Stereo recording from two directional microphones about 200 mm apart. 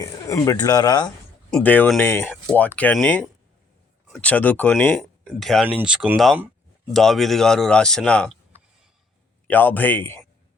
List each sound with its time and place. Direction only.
0.0 s speech: 15° left (ahead or behind)
1.5 s speech: 5° left (ahead or behind)